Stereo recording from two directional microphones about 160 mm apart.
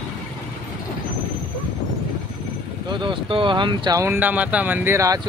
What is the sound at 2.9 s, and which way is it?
Speech, 30° right (ahead or behind).